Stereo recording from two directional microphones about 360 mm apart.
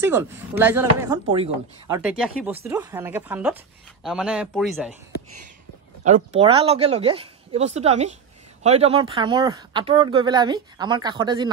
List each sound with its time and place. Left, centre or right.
0.0 s speech: centre
6.3 s speech: centre